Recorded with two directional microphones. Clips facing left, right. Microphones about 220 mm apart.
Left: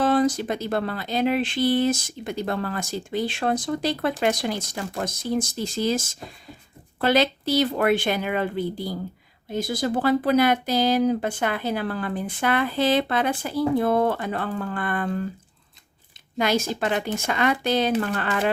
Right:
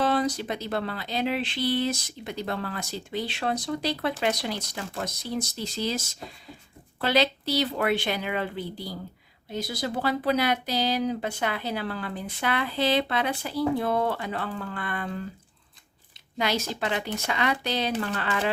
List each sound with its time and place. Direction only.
0.0 s speech: 50° left (ahead or behind)
16.4 s speech: 50° left (ahead or behind)